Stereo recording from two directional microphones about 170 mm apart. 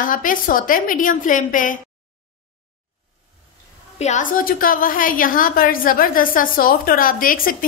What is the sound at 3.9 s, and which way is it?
A woman's voice, 45° left (ahead or behind).